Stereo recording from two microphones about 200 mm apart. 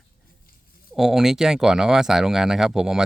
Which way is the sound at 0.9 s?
Centre (ahead or behind).